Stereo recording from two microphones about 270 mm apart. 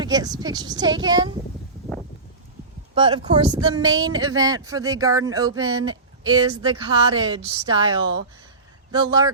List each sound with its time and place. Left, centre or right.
0.0 s speech: centre
2.9 s speech: centre